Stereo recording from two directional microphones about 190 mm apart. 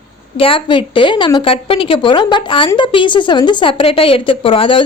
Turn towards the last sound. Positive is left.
turn(degrees=30)  # may be behind; listen again after turning